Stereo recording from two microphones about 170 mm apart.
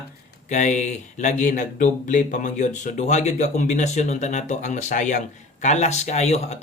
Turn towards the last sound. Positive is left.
turn(degrees=40)  # may be behind; listen again after turning